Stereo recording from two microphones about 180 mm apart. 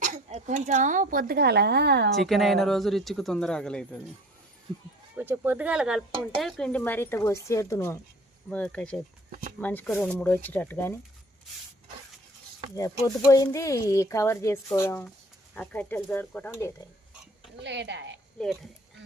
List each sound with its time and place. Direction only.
0.0 s speech: 40° right (ahead or behind); by 2.0 s 65° right (ahead or behind)
2.1 s speech: centre (ahead or behind)
5.1 s speech: 10° right (ahead or behind); by 10.9 s 10° left (ahead or behind)
12.7 s speech: 20° left (ahead or behind)
17.6 s a woman's voice: 75° right (ahead or behind)